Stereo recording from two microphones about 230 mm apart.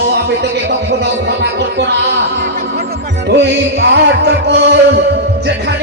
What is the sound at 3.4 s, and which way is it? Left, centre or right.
Music, right.